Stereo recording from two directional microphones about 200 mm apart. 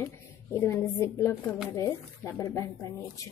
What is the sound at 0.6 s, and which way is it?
A woman's voice, 15° left (ahead or behind).